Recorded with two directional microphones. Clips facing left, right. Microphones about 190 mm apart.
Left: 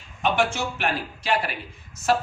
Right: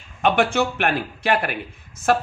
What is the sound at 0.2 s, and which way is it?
Speech, 60° right (ahead or behind).